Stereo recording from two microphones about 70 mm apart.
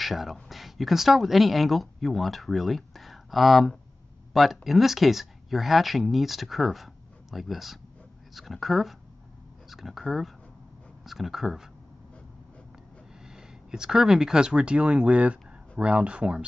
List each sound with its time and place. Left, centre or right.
0.0 s speech: centre
13.3 s speech: centre